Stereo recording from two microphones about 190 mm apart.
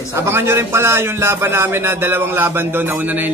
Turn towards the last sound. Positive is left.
turn(degrees=-10)  # may be behind; listen again after turning